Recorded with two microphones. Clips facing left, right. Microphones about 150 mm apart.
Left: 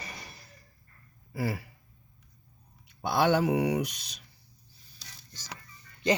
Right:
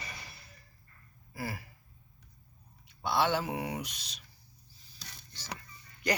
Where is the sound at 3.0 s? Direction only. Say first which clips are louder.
Left 5 dB; 55° left (ahead or behind); by 3.8 s 75° left (ahead or behind).